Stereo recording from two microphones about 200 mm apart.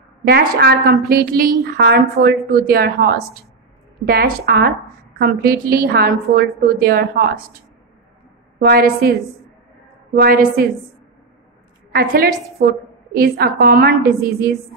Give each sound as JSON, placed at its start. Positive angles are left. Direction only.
{"t": 0.2, "sound": "a woman's voice", "side_deg": -50}
{"t": 8.5, "sound": "a woman's voice", "side_deg": -50}
{"t": 10.1, "sound": "a woman's voice", "side_deg": -45}
{"t": 11.9, "sound": "a woman's voice", "side_deg": -50}